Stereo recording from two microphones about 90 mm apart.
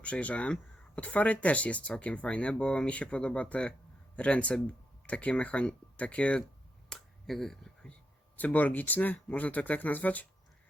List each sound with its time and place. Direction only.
0.0 s speech: 15° left (ahead or behind)
6.9 s finger snapping: 5° left (ahead or behind)
8.4 s speech: 20° left (ahead or behind)